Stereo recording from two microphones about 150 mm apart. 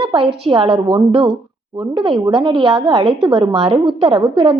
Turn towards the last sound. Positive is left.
turn(degrees=-40)  # may be behind; listen again after turning